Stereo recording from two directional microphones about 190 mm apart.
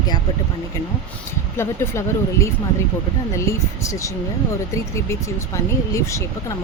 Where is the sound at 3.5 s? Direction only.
15° left (ahead or behind).